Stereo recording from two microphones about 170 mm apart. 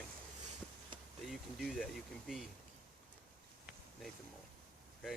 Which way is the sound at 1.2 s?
Centre (ahead or behind).